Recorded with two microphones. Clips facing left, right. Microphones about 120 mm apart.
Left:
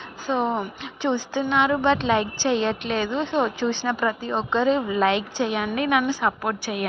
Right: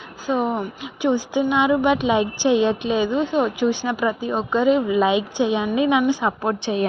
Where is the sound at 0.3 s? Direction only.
5° right (ahead or behind).